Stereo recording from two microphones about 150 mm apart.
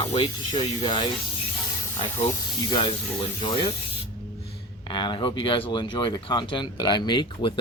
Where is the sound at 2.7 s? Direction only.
30° left (ahead or behind).